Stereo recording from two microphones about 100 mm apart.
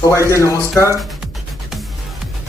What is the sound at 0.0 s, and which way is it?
Speech, 30° left (ahead or behind).